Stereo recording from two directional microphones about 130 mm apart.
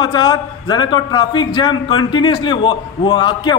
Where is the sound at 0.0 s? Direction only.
35° left (ahead or behind).